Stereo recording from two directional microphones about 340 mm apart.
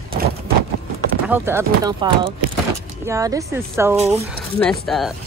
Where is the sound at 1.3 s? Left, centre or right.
Centre.